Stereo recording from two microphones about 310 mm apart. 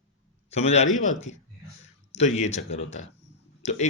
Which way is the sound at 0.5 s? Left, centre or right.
Left.